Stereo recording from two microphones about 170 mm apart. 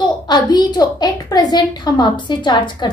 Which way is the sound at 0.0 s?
25° left (ahead or behind).